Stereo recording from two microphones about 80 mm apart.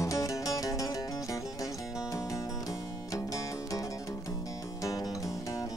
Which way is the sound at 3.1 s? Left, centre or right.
Left.